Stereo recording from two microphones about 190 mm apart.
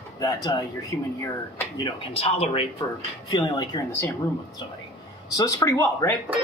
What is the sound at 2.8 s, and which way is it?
Speech, 20° left (ahead or behind).